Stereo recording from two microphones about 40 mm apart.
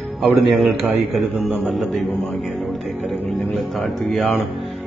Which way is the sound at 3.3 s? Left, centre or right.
Centre.